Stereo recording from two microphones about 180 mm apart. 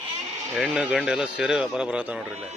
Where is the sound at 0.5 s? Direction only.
5° right (ahead or behind).